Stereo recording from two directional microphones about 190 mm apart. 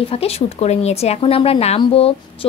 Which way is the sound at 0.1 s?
30° left (ahead or behind).